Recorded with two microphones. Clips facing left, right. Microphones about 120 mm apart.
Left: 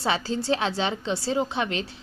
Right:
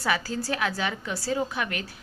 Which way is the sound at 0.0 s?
25° left (ahead or behind).